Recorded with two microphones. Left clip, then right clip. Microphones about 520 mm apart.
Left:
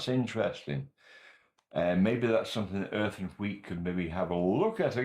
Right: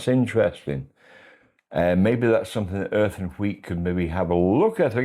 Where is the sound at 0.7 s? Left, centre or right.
Right.